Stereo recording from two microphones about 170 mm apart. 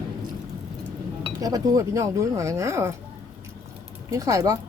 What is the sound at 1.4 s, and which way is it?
Speech, 20° right (ahead or behind).